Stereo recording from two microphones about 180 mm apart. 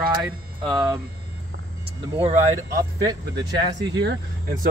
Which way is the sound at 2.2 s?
40° right (ahead or behind).